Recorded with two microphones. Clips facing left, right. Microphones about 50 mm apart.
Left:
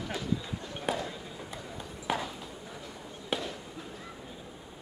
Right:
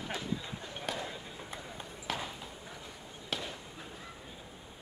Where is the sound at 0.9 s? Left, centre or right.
Centre.